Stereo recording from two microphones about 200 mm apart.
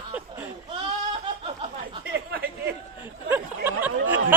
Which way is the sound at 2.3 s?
50° right (ahead or behind).